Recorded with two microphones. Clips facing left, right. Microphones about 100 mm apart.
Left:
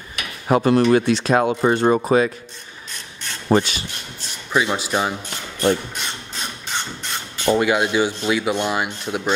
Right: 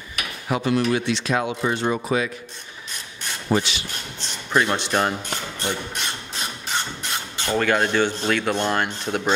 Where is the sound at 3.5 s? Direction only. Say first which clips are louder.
Left 5 dB; 45° left (ahead or behind).